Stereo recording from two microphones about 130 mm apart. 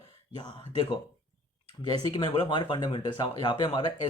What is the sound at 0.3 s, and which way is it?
Speech, 35° left (ahead or behind).